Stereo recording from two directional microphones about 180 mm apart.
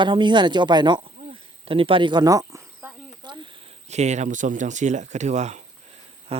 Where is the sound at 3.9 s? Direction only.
40° right (ahead or behind).